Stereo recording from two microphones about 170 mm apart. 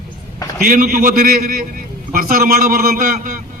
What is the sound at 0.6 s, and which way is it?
A man's voice, 55° right (ahead or behind).